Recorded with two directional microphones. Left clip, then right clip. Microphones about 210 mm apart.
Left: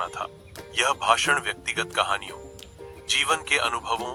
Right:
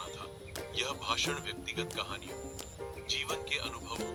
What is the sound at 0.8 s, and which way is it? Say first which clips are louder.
A man's voice: left 13 dB; 35° left (ahead or behind).